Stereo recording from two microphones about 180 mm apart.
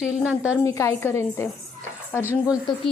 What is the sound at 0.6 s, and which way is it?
Speech, 15° left (ahead or behind).